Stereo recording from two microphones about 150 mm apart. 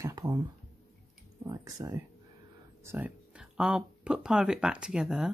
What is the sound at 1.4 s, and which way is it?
Speech, 25° right (ahead or behind).